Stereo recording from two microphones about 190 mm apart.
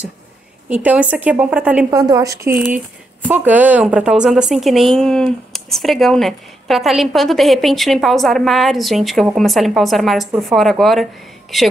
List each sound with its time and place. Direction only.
0.7 s speech: 5° right (ahead or behind)
1.9 s a woman's voice: 15° right (ahead or behind); by 11.1 s centre (ahead or behind)